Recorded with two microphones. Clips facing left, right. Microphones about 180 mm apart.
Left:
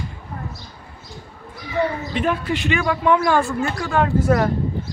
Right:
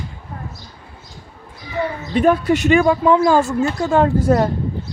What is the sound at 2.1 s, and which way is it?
Speech, 45° right (ahead or behind).